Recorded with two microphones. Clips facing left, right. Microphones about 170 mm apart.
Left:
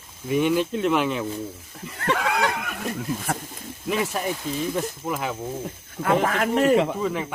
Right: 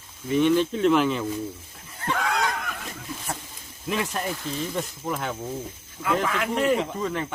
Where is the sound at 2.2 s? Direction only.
5° left (ahead or behind).